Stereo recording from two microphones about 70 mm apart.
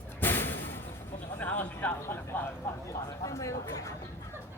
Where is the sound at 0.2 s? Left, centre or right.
Left.